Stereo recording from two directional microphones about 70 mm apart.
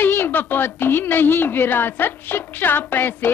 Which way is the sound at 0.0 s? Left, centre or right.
Left.